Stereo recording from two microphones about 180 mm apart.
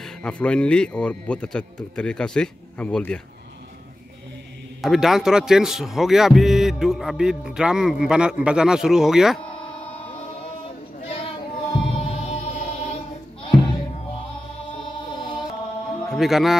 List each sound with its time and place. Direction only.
0.0 s speech: 5° left (ahead or behind)
4.8 s speech: centre (ahead or behind)
11.7 s music: 35° left (ahead or behind)
13.4 s music: 30° left (ahead or behind)
15.1 s music: 25° left (ahead or behind)
16.2 s speech: centre (ahead or behind)